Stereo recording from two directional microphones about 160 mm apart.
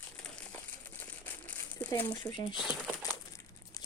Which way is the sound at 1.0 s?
10° left (ahead or behind).